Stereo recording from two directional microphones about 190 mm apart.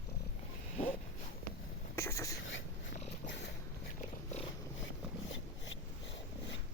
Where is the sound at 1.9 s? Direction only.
15° left (ahead or behind).